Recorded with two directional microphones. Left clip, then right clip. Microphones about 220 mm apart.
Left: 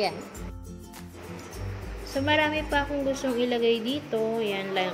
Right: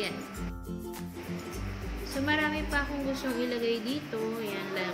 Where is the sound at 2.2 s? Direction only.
20° left (ahead or behind).